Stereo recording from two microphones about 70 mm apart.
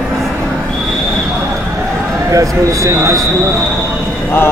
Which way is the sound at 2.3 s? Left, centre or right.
Right.